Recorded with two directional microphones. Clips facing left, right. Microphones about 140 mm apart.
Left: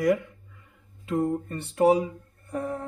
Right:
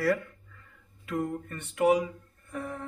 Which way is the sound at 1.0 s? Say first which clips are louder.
Left 6 dB; 30° left (ahead or behind).